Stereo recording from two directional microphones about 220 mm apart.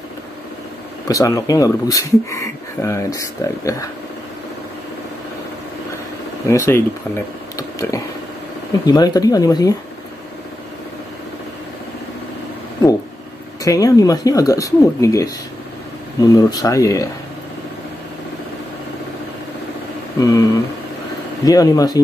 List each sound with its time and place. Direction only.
1.0 s speech: 15° left (ahead or behind)
6.5 s speech: 10° left (ahead or behind)
7.5 s a sound: 15° left (ahead or behind)
8.8 s speech: 20° left (ahead or behind)
13.7 s speech: 15° left (ahead or behind)
20.2 s speech: 15° left (ahead or behind)
21.5 s speech: 15° left (ahead or behind)